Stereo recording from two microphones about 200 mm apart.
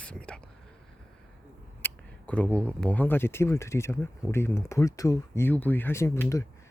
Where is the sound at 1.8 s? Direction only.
5° left (ahead or behind).